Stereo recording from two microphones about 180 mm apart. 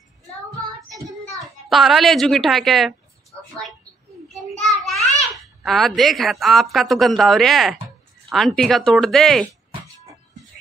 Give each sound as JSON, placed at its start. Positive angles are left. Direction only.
{"t": 0.9, "sound": "child singing", "side_deg": -20}
{"t": 1.7, "sound": "speech", "side_deg": 0}
{"t": 4.3, "sound": "a sound", "side_deg": 0}
{"t": 6.4, "sound": "speech", "side_deg": 0}